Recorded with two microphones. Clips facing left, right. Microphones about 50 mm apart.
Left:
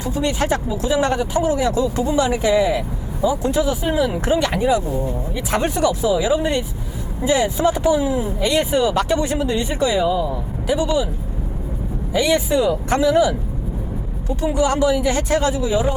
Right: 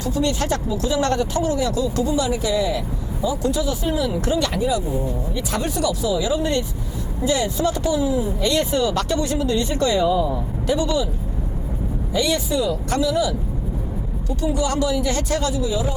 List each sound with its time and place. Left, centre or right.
0.0 s speech: left
4.5 s speech: left
8.4 s speech: centre
12.1 s speech: left